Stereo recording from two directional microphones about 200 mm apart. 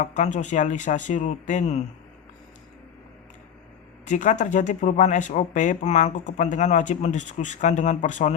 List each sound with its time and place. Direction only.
0.2 s speech: 35° left (ahead or behind)
4.0 s speech: 40° left (ahead or behind)